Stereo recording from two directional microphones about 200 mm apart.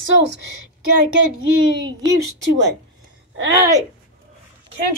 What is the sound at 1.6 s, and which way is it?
Speech, 20° right (ahead or behind).